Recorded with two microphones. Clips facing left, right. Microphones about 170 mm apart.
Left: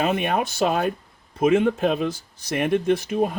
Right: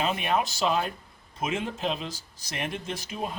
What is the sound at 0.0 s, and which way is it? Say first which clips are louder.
Speech: left 5 dB; 55° left (ahead or behind).